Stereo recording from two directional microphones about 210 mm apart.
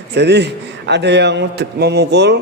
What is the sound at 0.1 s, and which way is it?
A man's voice, 55° right (ahead or behind).